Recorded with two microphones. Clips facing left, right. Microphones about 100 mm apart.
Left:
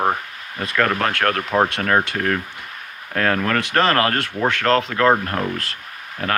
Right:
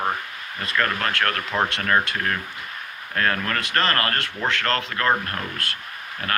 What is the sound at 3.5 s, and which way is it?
Speech, 80° left.